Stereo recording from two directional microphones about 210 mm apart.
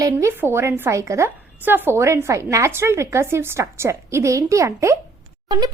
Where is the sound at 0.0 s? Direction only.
15° right (ahead or behind).